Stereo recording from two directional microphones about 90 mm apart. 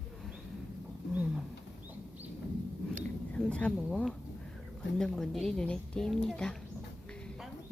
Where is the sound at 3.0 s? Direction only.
15° left (ahead or behind).